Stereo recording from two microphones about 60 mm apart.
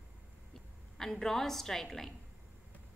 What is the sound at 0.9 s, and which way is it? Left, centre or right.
A woman's voice, centre.